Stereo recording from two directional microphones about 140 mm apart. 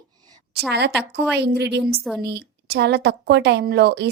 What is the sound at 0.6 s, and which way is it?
A woman's voice, centre (ahead or behind).